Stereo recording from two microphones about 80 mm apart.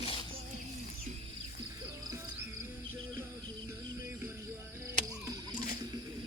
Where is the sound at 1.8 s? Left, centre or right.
Right.